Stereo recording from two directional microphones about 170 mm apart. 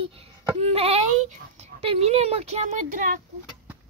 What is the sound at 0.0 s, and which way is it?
Speech, 35° right (ahead or behind).